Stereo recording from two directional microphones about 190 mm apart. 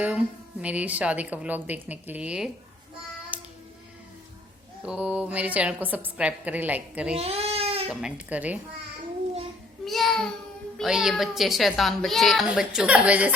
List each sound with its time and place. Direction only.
0.6 s a woman's voice: 5° right (ahead or behind)
3.3 s music: 10° right (ahead or behind)
4.8 s a woman's voice: 5° right (ahead or behind)
7.2 s baby cry: 30° right (ahead or behind)
7.9 s a woman's voice: 5° right (ahead or behind)
9.8 s child singing: centre (ahead or behind)
10.8 s a woman's voice: centre (ahead or behind)